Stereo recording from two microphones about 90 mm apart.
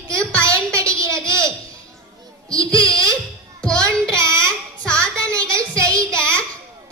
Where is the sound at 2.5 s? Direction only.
40° right (ahead or behind).